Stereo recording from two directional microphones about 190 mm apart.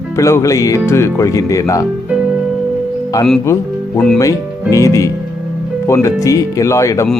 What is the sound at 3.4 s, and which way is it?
Speech, 15° left (ahead or behind).